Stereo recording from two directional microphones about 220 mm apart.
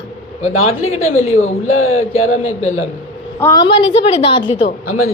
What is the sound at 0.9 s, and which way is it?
A man's voice, 30° left (ahead or behind).